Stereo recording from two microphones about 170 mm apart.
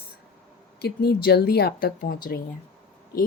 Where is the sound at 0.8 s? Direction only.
70° left (ahead or behind).